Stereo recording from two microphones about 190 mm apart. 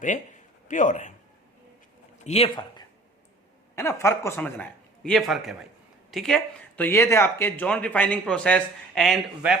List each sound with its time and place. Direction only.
0.7 s speech: 40° left (ahead or behind)
2.1 s speech: 35° left (ahead or behind)
3.8 s speech: 15° left (ahead or behind)